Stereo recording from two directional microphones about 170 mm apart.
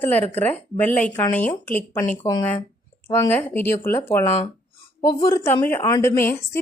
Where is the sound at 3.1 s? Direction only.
10° left (ahead or behind).